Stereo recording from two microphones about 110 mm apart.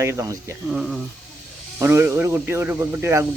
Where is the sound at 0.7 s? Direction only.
5° right (ahead or behind).